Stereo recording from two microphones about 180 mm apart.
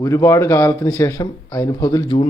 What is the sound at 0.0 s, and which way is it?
Speech, 15° left (ahead or behind).